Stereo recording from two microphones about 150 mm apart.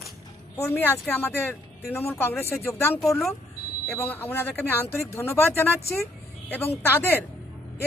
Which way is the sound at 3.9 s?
10° left (ahead or behind).